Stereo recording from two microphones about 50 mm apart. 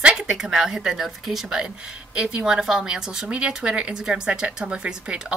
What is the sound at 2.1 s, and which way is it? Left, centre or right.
Speech, centre.